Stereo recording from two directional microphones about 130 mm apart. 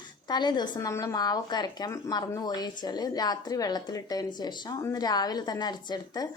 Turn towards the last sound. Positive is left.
turn(degrees=30)  # may be behind; listen again after turning